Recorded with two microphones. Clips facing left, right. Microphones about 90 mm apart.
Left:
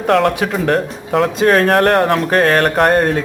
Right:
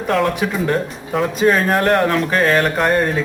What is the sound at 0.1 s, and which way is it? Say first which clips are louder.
Speech: left 4 dB; 65° left (ahead or behind).